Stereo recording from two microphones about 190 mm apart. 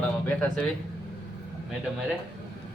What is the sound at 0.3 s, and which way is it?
Speech, 5° left (ahead or behind).